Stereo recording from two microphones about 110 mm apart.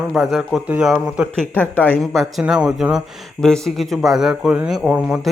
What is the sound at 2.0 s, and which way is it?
Speech, centre (ahead or behind).